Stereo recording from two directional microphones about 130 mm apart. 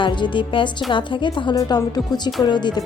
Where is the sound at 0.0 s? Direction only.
40° left (ahead or behind).